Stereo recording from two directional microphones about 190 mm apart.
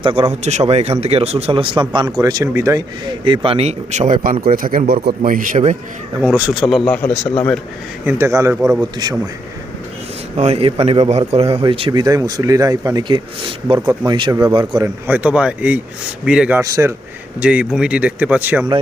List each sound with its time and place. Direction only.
0.0 s a man's voice: 30° right (ahead or behind)
6.1 s speech: 5° right (ahead or behind)
8.0 s a man's voice: 15° right (ahead or behind)
10.3 s a man's voice: 35° right (ahead or behind)
15.0 s speech: 10° right (ahead or behind)